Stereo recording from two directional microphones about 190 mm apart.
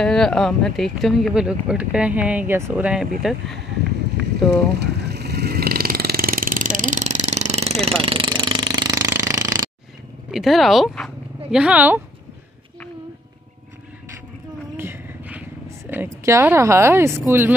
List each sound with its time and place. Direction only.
0.0 s speech: 5° left (ahead or behind)
4.7 s vehicle: 60° right (ahead or behind); by 7.7 s 35° right (ahead or behind)
7.8 s jackhammer: 30° right (ahead or behind)
10.3 s speech: centre (ahead or behind)
14.8 s a sound: 10° right (ahead or behind)
15.9 s speech: 10° right (ahead or behind)